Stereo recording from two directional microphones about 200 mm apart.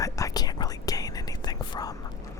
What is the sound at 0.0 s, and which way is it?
Whispering, 15° left (ahead or behind).